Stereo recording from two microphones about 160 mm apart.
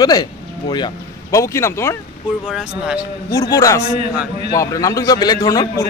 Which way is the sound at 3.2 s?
20° left (ahead or behind).